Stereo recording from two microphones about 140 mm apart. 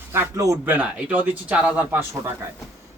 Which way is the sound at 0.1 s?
20° right (ahead or behind).